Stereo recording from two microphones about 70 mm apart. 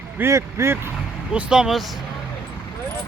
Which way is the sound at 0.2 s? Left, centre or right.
Right.